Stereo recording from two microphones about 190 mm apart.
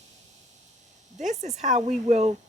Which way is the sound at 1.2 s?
40° right (ahead or behind).